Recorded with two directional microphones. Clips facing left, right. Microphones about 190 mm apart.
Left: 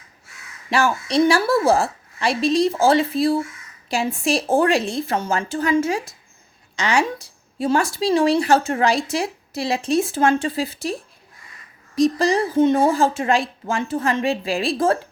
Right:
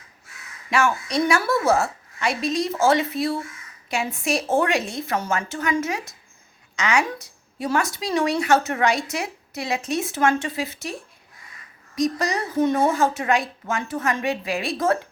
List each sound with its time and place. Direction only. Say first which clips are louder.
0.7 s speech: left 2 dB; 35° left (ahead or behind)
11.9 s speech: left 6 dB; 30° left (ahead or behind)